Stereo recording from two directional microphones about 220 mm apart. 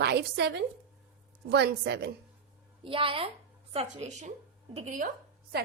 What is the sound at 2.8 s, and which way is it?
A woman's voice, 25° right (ahead or behind).